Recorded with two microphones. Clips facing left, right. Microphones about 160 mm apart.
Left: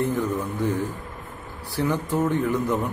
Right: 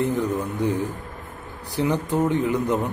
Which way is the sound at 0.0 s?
15° right (ahead or behind).